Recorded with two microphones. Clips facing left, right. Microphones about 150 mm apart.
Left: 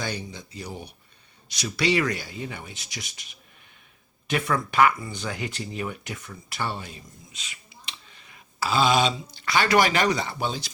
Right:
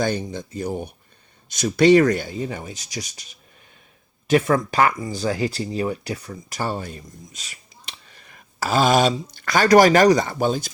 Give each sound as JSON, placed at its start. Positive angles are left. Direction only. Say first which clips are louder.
{"t": 0.0, "sound": "speech", "louder": "right 9 dB", "side_deg": -50}